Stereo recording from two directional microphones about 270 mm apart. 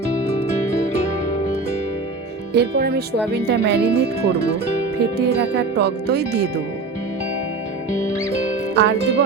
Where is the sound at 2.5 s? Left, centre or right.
Right.